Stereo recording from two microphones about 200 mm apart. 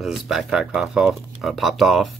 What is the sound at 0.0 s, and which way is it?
Speech, centre (ahead or behind).